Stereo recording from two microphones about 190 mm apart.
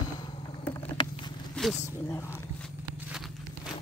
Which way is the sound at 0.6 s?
15° left (ahead or behind).